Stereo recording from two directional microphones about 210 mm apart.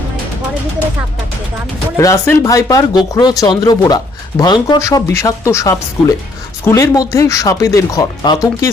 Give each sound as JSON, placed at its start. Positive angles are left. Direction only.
{"t": 2.0, "sound": "speech", "side_deg": 15}